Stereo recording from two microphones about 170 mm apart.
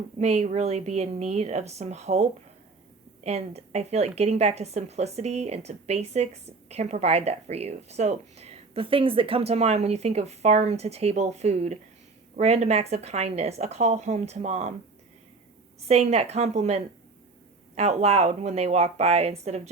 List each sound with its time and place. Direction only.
0.2 s a woman's voice: 40° right (ahead or behind)
15.9 s a woman's voice: 40° right (ahead or behind)